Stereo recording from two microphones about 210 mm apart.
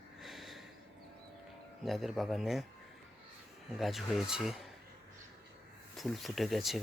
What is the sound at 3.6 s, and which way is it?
Speech, centre (ahead or behind).